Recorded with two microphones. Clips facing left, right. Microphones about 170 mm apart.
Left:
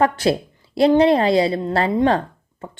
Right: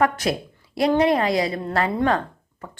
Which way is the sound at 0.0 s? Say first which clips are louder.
Left 4 dB; 30° left (ahead or behind).